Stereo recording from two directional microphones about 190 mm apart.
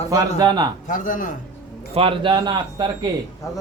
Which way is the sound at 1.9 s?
30° right (ahead or behind).